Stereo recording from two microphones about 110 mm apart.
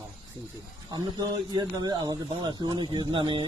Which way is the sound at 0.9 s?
35° right (ahead or behind).